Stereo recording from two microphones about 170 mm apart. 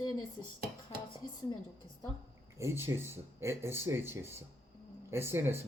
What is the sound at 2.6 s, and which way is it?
Speech, 15° right (ahead or behind).